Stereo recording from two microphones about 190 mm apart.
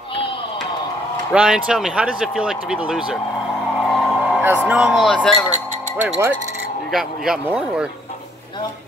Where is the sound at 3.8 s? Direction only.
Centre (ahead or behind).